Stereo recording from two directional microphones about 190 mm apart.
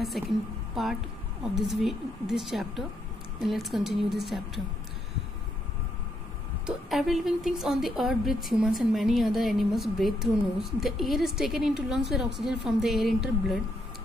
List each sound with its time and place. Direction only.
0.2 s a woman's voice: centre (ahead or behind)
6.6 s a woman's voice: centre (ahead or behind)